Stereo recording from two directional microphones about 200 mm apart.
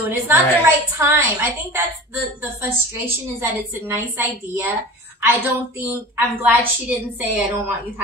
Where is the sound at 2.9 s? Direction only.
10° right (ahead or behind).